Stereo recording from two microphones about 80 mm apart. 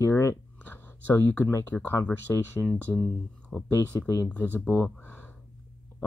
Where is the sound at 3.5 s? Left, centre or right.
Left.